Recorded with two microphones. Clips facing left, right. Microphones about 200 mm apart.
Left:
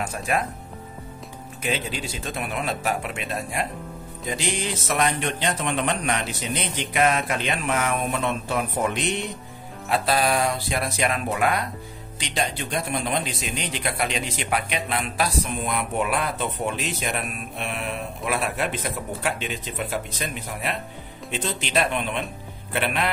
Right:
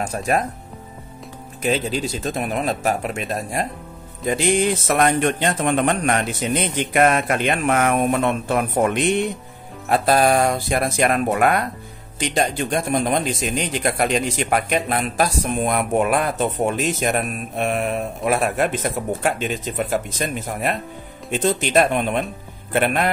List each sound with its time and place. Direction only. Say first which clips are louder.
0.0 s speech: right 5 dB; 40° right (ahead or behind)
1.6 s speech: right 7 dB; 40° right (ahead or behind)
4.3 s speech: right 9 dB; 55° right (ahead or behind)